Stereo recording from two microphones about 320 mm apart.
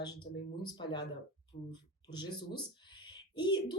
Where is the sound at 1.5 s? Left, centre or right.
Left.